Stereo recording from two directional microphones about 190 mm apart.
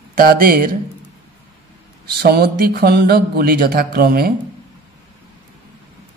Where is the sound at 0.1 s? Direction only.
50° right (ahead or behind).